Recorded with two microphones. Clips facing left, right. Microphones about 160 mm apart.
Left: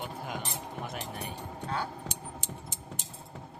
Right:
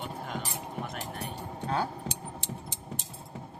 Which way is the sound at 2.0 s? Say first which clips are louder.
Right 2 dB; 10° right (ahead or behind).